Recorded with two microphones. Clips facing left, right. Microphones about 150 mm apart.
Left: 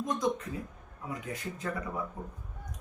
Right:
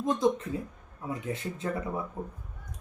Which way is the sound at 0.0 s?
25° right (ahead or behind).